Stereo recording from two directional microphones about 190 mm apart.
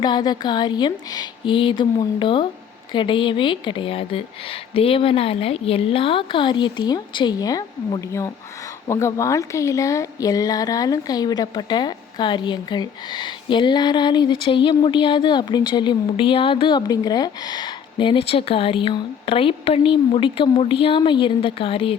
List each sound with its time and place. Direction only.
0.0 s a woman's voice: 25° left (ahead or behind)